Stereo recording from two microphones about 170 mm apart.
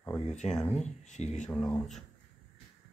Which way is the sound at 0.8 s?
45° left (ahead or behind).